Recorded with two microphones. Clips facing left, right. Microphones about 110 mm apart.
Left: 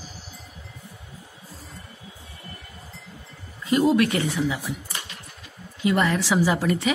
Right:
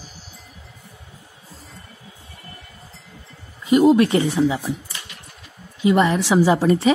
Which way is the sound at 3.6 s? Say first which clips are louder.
Right 5 dB; 20° right (ahead or behind).